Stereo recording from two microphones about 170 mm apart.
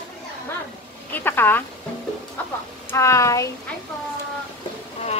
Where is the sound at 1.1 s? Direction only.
10° left (ahead or behind).